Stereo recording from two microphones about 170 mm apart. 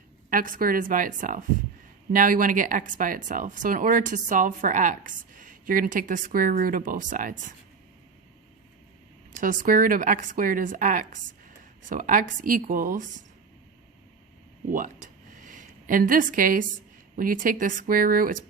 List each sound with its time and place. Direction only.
0.3 s speech: 55° right (ahead or behind)
9.4 s speech: 50° right (ahead or behind)
15.4 s a woman's voice: 50° right (ahead or behind)